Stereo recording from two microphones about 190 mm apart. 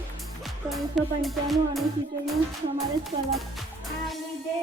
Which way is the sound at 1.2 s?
Centre (ahead or behind).